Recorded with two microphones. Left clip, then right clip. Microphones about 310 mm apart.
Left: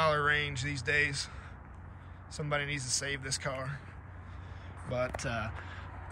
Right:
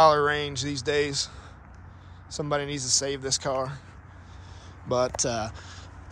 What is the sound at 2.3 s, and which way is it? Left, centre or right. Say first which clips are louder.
A man's voice: right 6 dB; centre.